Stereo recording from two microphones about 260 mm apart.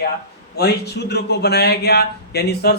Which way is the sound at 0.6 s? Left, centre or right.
Left.